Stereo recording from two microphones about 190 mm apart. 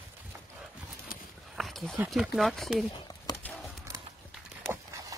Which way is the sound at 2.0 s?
5° right (ahead or behind).